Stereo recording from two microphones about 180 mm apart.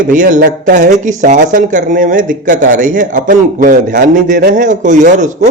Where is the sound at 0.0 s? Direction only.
45° right (ahead or behind).